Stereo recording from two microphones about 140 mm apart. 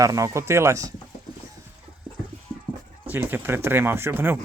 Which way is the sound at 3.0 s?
15° right (ahead or behind).